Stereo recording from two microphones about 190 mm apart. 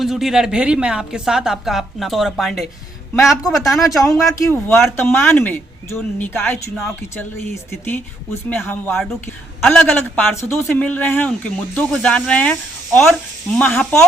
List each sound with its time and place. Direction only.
0.0 s a woman's voice: centre (ahead or behind)
3.8 s a man's voice: 15° left (ahead or behind)